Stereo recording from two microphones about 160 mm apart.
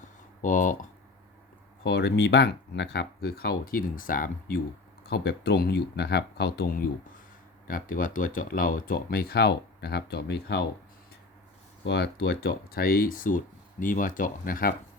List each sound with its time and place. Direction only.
0.4 s speech: 55° left (ahead or behind)
1.8 s speech: 90° left; by 4.6 s 60° left (ahead or behind)
5.0 s speech: 90° left
7.7 s speech: 60° left (ahead or behind); by 10.7 s 85° left
11.9 s speech: 90° left; by 14.7 s 60° left (ahead or behind)